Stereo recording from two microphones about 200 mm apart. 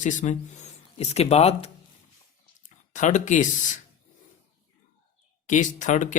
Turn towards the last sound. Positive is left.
turn(degrees=40)  # may be behind; listen again after turning